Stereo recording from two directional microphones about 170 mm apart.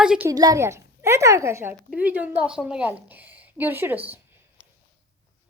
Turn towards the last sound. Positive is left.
turn(degrees=-10)  # may be behind; listen again after turning